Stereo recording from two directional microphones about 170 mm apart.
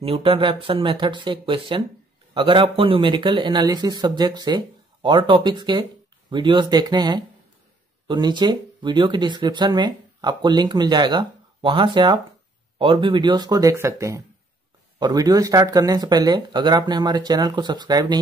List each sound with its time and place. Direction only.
0.0 s speech: 30° right (ahead or behind)